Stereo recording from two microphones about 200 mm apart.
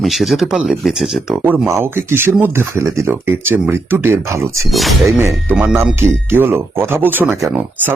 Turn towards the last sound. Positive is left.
turn(degrees=-5)  # may be behind; listen again after turning